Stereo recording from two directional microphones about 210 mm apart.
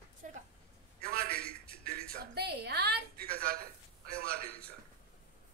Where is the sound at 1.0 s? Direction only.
45° right (ahead or behind).